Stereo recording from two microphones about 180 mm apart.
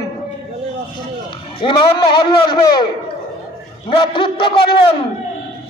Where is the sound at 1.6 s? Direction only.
25° left (ahead or behind).